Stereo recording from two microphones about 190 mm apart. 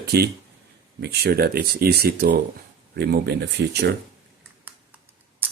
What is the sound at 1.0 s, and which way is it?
Speech, 55° right (ahead or behind).